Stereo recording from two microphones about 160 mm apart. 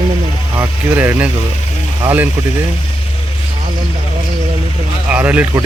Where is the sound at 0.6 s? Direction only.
15° right (ahead or behind).